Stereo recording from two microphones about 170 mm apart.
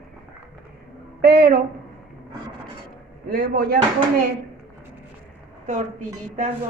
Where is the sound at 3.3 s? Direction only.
60° right (ahead or behind).